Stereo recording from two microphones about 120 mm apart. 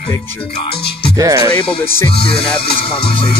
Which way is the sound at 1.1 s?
25° right (ahead or behind).